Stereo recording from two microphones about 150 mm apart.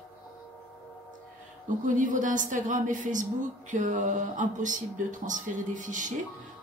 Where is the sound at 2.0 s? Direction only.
60° right (ahead or behind).